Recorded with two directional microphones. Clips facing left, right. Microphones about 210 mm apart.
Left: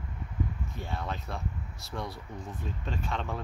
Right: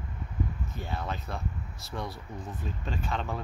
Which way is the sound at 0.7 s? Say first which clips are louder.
Right 1 dB; centre (ahead or behind).